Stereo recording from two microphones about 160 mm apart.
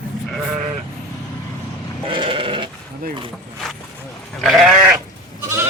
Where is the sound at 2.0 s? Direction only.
30° right (ahead or behind).